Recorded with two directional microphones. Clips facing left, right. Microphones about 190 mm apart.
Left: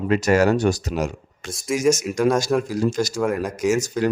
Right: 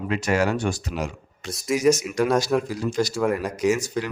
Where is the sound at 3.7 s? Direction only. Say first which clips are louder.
Left 6 dB; 45° left (ahead or behind).